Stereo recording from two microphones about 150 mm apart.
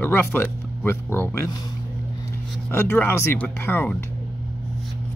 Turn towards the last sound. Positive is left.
turn(degrees=10)  # may be behind; listen again after turning